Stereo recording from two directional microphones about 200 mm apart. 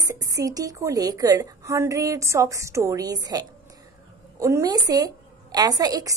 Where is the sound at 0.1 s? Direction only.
15° right (ahead or behind).